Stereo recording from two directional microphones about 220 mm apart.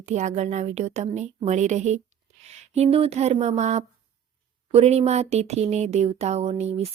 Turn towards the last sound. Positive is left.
turn(degrees=-30)  # may be behind; listen again after turning